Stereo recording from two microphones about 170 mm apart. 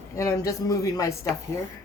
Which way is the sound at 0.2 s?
20° left (ahead or behind).